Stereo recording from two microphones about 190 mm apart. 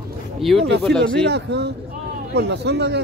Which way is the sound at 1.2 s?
60° right (ahead or behind).